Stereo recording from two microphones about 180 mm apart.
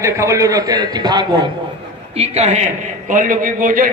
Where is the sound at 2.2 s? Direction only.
40° right (ahead or behind).